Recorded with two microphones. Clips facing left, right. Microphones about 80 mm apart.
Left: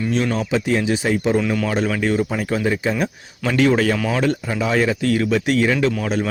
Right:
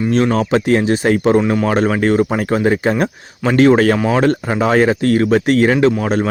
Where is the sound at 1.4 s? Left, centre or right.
Right.